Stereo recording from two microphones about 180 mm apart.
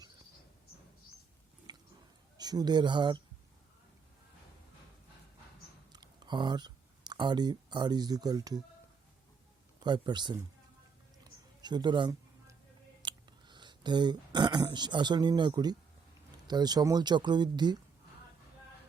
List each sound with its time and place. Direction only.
1.7 s a sound: 20° right (ahead or behind)
2.4 s speech: 20° right (ahead or behind)
5.9 s speech: 25° right (ahead or behind)
9.8 s speech: 25° right (ahead or behind)
11.2 s a sound: 25° right (ahead or behind)
13.0 s speech: 25° right (ahead or behind)